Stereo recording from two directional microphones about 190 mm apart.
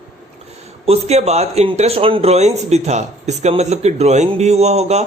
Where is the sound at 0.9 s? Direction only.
35° right (ahead or behind).